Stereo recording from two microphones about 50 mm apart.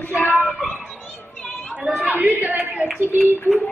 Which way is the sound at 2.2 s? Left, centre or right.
Right.